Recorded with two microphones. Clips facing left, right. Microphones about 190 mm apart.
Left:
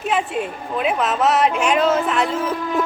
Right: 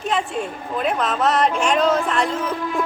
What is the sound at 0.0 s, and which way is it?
A woman's voice, 5° left (ahead or behind).